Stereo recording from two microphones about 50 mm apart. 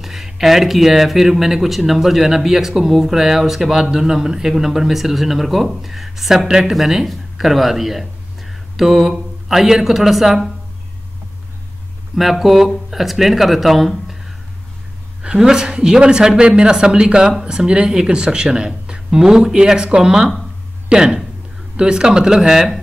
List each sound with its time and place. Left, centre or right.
0.0 s a woman's voice: centre
6.7 s speech: centre
12.2 s a woman's voice: centre